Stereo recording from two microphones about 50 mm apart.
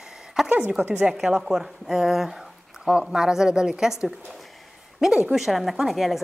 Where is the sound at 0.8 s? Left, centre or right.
Right.